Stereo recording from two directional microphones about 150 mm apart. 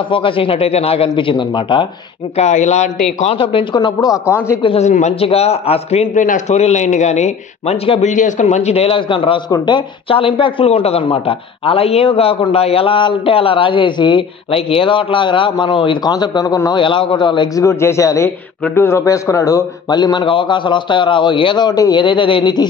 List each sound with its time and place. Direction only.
0.1 s a man's voice: 35° left (ahead or behind)
2.3 s a man's voice: 50° left (ahead or behind)
3.2 s a man's voice: 40° left (ahead or behind)
4.6 s a man's voice: 50° left (ahead or behind)
8.1 s a man's voice: 55° left (ahead or behind); by 22.7 s 30° left (ahead or behind)